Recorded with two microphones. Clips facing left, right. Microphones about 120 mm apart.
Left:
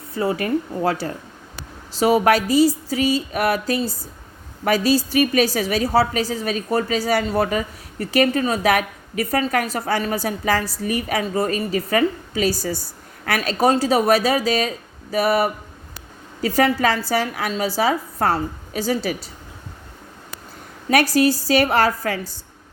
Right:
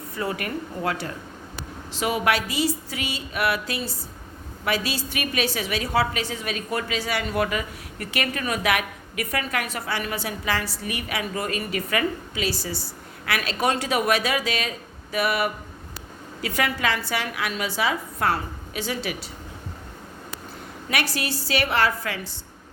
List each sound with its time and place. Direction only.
0.1 s a woman's voice: 30° left (ahead or behind)
20.9 s a woman's voice: 40° left (ahead or behind)